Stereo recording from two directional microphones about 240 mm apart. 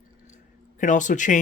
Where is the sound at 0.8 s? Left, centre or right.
Left.